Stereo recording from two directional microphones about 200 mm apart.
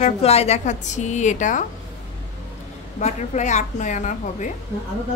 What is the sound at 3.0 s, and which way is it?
A woman's voice, 35° left (ahead or behind).